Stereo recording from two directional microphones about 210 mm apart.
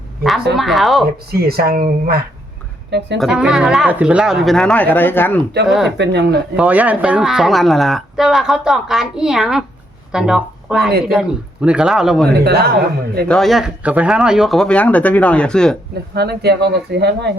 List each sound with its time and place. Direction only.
0.2 s speech: centre (ahead or behind)
1.3 s speech: 45° right (ahead or behind)
3.2 s speech: 5° right (ahead or behind)
5.6 s speech: centre (ahead or behind)
6.0 s speech: 55° right (ahead or behind)
6.6 s speech: 5° right (ahead or behind)
12.5 s speech: 50° right (ahead or behind)
13.2 s speech: centre (ahead or behind)
16.1 s speech: 50° right (ahead or behind)